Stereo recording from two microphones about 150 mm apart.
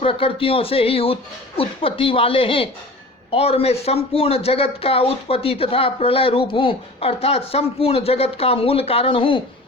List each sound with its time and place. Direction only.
0.0 s speech: 40° left (ahead or behind)